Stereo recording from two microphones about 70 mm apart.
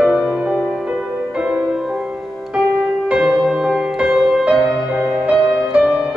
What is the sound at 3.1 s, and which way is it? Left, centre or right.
Music, centre.